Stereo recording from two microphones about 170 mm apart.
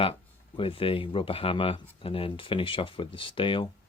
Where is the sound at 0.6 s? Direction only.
30° left (ahead or behind).